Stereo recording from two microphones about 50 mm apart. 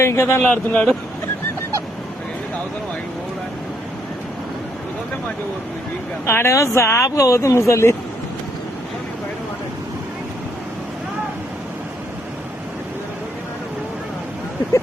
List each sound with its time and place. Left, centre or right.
0.0 s a man's voice: left
0.5 s speech: left
6.2 s a man's voice: left
6.5 s speech: left